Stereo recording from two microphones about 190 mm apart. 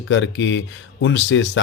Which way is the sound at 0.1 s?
75° left (ahead or behind).